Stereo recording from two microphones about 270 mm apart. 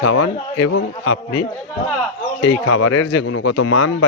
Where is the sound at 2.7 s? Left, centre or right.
Left.